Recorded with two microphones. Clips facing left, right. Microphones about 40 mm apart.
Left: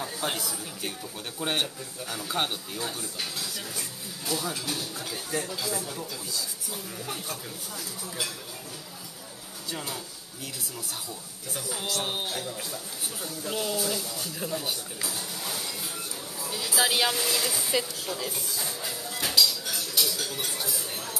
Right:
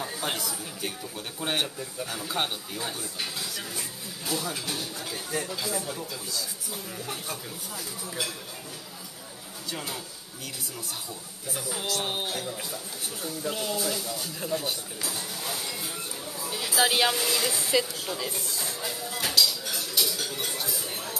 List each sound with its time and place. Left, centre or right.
0.0 s a man's voice: centre
9.7 s speech: centre
11.5 s a man's voice: centre
18.0 s dishes: centre